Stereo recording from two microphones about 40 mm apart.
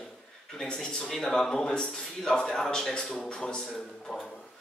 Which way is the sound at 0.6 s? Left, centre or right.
Centre.